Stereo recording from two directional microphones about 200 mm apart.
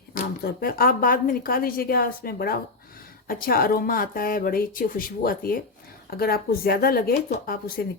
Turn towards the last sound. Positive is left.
turn(degrees=50)  # may be behind; listen again after turning